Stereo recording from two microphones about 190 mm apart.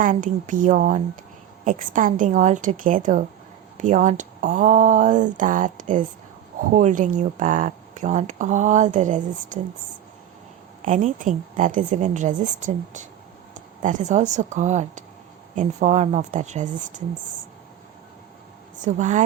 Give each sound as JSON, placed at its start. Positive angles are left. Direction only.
{"t": 0.0, "sound": "a woman's voice", "side_deg": -45}
{"t": 10.8, "sound": "speech", "side_deg": -40}
{"t": 18.8, "sound": "speech", "side_deg": -40}